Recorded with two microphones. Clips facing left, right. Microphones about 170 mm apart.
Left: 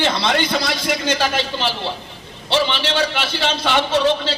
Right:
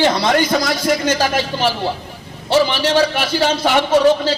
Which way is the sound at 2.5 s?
40° right (ahead or behind).